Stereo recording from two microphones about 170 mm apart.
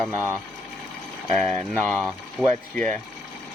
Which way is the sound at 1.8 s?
5° left (ahead or behind).